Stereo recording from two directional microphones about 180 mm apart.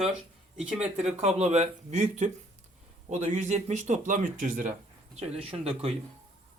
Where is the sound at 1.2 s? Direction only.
40° right (ahead or behind).